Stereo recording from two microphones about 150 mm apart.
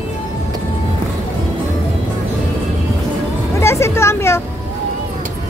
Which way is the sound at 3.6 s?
20° left (ahead or behind).